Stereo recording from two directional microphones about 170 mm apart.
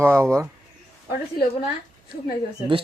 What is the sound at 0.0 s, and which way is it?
Speech, 15° right (ahead or behind).